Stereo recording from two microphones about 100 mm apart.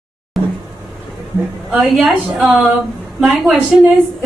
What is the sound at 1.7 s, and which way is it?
A woman's voice, centre (ahead or behind).